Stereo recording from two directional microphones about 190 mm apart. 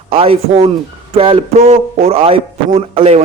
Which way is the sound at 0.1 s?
30° right (ahead or behind).